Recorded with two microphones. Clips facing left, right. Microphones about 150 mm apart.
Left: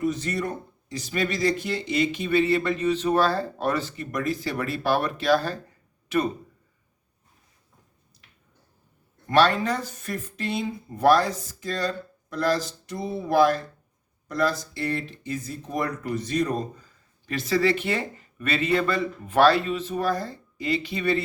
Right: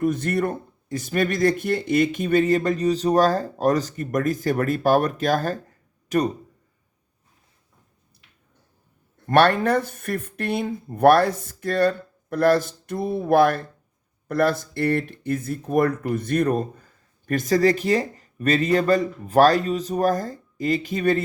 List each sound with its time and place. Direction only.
0.0 s speech: 55° right (ahead or behind)
9.3 s speech: 55° right (ahead or behind)